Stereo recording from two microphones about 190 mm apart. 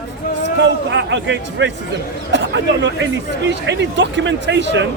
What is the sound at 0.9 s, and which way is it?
Speech, 70° right (ahead or behind).